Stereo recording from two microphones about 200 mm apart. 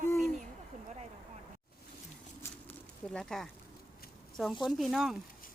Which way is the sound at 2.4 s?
5° left (ahead or behind).